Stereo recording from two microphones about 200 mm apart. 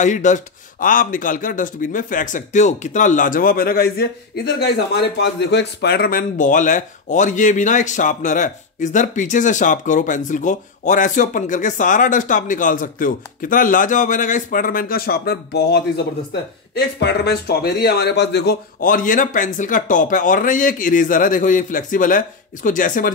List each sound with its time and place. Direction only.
0.0 s a man's voice: 40° left (ahead or behind)